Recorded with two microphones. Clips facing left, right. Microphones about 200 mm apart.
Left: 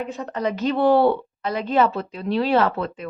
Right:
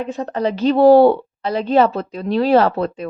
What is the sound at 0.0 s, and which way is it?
A woman's voice, 35° right (ahead or behind).